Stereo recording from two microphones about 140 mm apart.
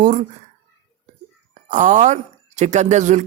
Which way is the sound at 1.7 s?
60° right (ahead or behind).